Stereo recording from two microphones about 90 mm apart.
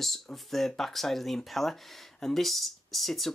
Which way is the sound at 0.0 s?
5° left (ahead or behind).